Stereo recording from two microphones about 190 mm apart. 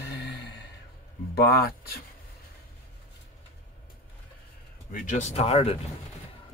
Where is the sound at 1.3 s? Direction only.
55° left (ahead or behind).